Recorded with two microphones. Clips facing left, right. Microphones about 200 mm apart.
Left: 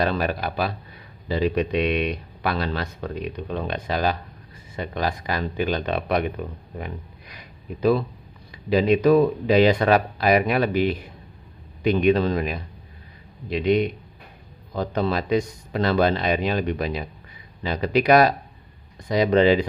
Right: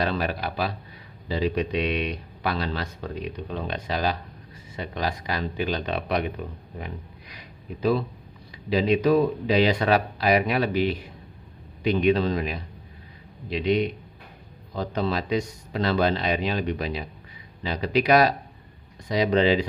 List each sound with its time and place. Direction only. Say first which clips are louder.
0.0 s speech: left 3 dB; 50° left (ahead or behind)
6.8 s a sound: left 3 dB; 50° left (ahead or behind)
8.6 s speech: left 3 dB; 50° left (ahead or behind)